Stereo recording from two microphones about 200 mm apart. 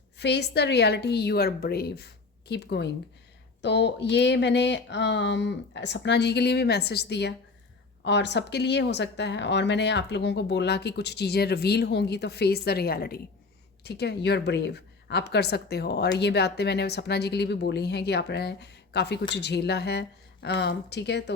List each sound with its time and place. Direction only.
0.2 s a woman's voice: 55° left (ahead or behind)